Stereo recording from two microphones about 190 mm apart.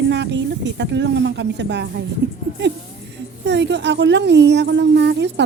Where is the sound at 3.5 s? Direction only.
65° right (ahead or behind).